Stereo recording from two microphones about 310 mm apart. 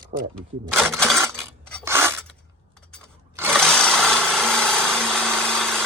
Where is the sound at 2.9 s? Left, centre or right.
Centre.